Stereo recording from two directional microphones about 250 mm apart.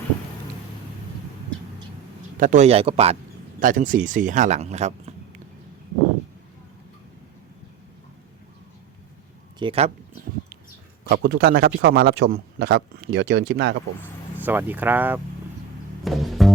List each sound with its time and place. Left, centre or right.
2.4 s speech: right
9.6 s speech: right
11.1 s speech: right
14.3 s speech: centre
16.0 s music: centre